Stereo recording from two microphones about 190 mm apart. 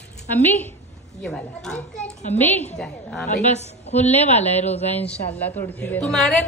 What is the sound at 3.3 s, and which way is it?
A woman's voice, 35° left (ahead or behind).